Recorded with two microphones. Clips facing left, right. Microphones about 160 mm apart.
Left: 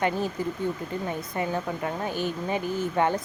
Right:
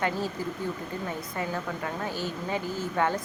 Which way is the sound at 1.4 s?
20° left (ahead or behind).